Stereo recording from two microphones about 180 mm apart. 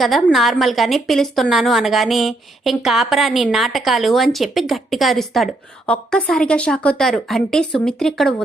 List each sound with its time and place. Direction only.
0.0 s a woman's voice: centre (ahead or behind)